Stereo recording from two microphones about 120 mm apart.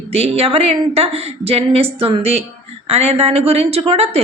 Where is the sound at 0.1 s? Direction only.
55° right (ahead or behind).